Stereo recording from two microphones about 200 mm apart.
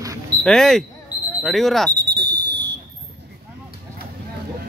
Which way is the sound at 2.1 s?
55° right (ahead or behind).